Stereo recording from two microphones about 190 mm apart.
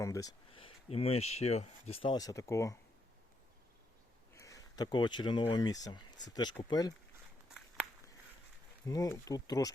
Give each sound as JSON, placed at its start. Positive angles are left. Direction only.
{"t": 0.0, "sound": "speech", "side_deg": 20}
{"t": 4.4, "sound": "speech", "side_deg": 15}
{"t": 7.8, "sound": "a sound", "side_deg": -5}
{"t": 8.9, "sound": "speech", "side_deg": 20}